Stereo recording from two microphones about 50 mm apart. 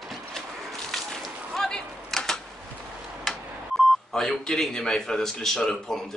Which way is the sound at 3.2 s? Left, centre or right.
Centre.